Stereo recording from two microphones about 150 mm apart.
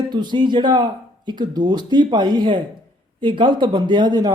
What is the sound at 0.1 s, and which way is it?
Speech, 30° right (ahead or behind).